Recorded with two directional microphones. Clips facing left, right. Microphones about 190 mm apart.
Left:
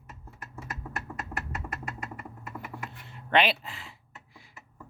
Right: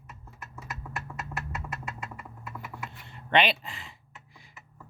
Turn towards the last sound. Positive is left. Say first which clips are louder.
# even
turn(degrees=5)  # may be behind; listen again after turning